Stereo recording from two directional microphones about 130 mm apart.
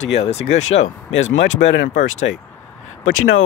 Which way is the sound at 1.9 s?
60° left (ahead or behind).